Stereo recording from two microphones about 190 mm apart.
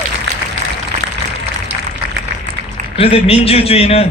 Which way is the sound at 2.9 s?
30° left (ahead or behind).